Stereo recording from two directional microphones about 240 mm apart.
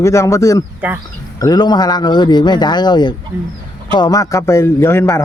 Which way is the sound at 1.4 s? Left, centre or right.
Centre.